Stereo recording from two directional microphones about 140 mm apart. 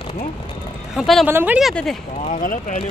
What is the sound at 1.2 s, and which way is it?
Speech, 10° right (ahead or behind).